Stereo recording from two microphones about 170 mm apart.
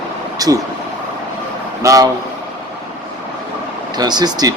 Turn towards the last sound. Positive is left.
turn(degrees=-25)  # may be behind; listen again after turning